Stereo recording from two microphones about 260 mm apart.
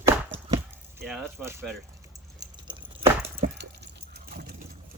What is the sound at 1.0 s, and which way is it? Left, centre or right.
Speech, centre.